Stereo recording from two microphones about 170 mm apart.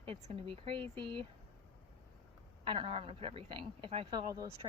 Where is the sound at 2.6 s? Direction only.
30° right (ahead or behind).